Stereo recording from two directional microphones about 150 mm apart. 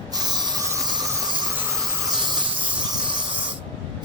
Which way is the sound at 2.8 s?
30° right (ahead or behind).